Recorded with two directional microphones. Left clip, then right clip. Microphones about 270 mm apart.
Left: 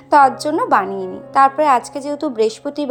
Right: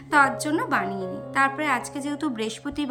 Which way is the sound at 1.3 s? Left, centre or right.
Centre.